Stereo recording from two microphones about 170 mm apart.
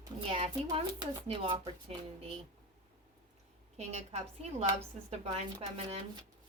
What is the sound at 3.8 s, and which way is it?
Speech, 40° right (ahead or behind).